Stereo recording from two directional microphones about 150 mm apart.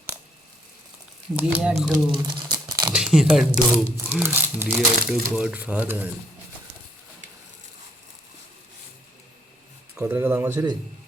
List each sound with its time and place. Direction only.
1.4 s speech: 10° right (ahead or behind)
2.2 s crumpling: 30° right (ahead or behind)
2.9 s speech: 5° right (ahead or behind)
9.9 s speech: 5° right (ahead or behind)